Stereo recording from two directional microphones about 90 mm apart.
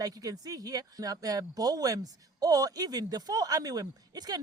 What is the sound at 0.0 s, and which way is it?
Speech, 45° right (ahead or behind).